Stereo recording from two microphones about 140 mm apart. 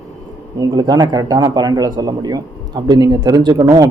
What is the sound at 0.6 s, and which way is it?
Speech, 25° right (ahead or behind).